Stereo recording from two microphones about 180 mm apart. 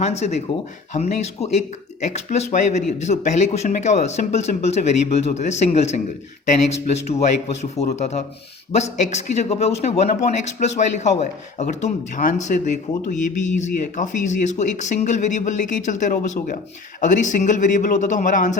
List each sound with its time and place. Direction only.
0.0 s a man's voice: 35° left (ahead or behind)